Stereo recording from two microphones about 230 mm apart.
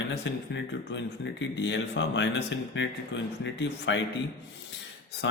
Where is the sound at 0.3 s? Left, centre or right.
Left.